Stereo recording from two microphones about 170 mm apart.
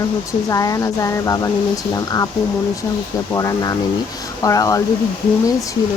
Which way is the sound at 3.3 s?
20° left (ahead or behind).